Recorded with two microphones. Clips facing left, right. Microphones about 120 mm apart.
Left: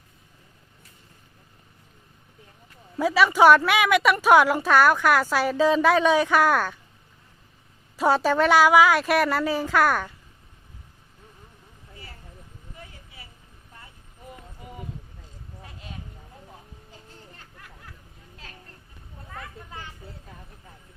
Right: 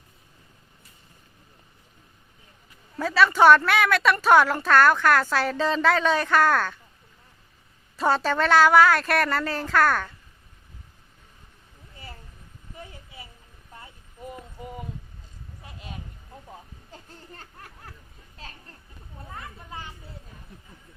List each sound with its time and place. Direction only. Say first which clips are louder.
3.0 s a woman's voice: left 1 dB; 10° left (ahead or behind)
7.9 s a woman's voice: left 2 dB; 10° left (ahead or behind)
17.3 s a sound: right 3 dB; 40° right (ahead or behind)